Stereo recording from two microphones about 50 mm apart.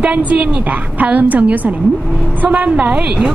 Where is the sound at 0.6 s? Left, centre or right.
Right.